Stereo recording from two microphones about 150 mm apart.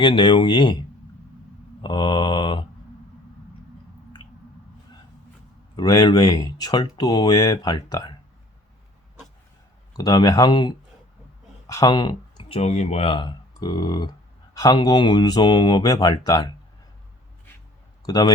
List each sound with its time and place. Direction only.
0.0 s speech: 30° left (ahead or behind)
5.7 s speech: 25° left (ahead or behind)
10.0 s speech: 25° left (ahead or behind)
18.0 s a man's voice: 25° left (ahead or behind)